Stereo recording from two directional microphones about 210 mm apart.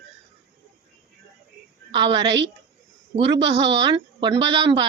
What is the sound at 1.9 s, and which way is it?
A woman's voice, 25° right (ahead or behind).